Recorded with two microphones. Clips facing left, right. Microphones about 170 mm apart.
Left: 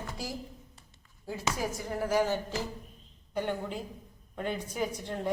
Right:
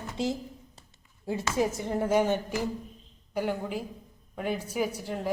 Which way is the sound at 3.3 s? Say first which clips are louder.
Right 3 dB; 10° right (ahead or behind).